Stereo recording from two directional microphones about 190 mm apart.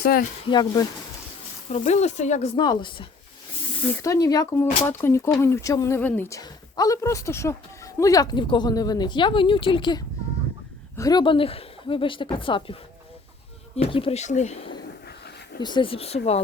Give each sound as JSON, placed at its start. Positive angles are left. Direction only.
{"t": 0.0, "sound": "speech", "side_deg": 50}
{"t": 0.4, "sound": "speech", "side_deg": 20}
{"t": 1.7, "sound": "speech", "side_deg": 35}
{"t": 2.6, "sound": "speech", "side_deg": 25}
{"t": 13.9, "sound": "speech", "side_deg": 30}